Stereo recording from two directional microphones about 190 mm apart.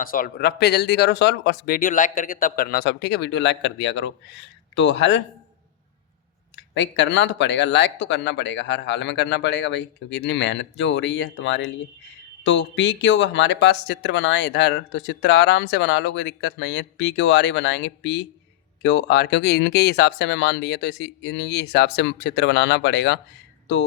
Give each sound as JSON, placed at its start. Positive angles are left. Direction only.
{"t": 0.0, "sound": "speech", "side_deg": 50}
{"t": 6.6, "sound": "speech", "side_deg": 70}